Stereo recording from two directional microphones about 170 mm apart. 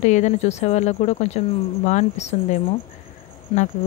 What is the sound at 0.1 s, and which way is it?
Speech, 45° left (ahead or behind).